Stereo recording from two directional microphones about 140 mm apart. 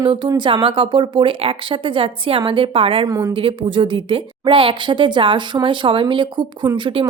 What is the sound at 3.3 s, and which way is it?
A woman's voice, 40° right (ahead or behind).